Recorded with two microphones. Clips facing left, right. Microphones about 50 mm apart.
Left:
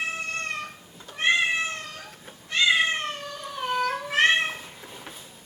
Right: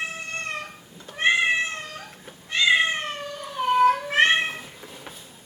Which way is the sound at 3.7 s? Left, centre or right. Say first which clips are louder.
Right 6 dB; right.